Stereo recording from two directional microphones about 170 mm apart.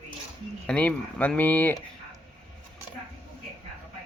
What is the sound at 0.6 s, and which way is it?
Speech, 5° left (ahead or behind).